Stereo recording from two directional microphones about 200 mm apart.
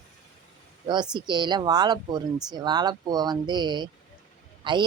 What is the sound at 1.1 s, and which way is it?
Speech, 20° right (ahead or behind).